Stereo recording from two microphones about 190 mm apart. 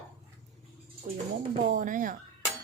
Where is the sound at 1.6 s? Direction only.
45° right (ahead or behind).